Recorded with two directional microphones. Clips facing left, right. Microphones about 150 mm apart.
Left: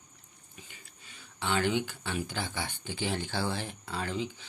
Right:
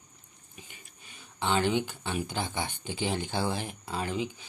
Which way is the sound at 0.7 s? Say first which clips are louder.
Right 1 dB; 20° right (ahead or behind).